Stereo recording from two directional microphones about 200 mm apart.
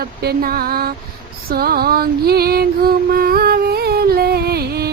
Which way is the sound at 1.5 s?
50° right (ahead or behind).